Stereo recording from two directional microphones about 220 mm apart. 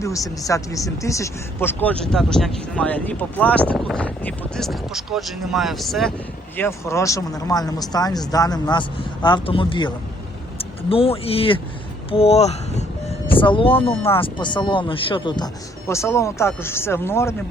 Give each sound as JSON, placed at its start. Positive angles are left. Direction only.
{"t": 0.0, "sound": "speech", "side_deg": 15}
{"t": 6.6, "sound": "speech", "side_deg": 10}